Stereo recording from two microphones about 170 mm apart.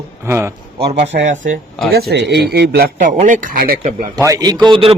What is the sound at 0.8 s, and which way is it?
Speech, 35° right (ahead or behind).